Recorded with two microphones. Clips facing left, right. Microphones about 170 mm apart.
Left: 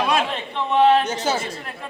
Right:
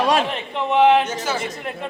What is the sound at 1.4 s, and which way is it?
Speech, 20° right (ahead or behind).